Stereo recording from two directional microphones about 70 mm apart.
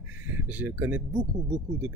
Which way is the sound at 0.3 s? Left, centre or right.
Right.